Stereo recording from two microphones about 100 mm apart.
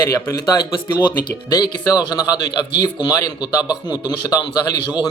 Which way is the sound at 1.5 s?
45° left (ahead or behind).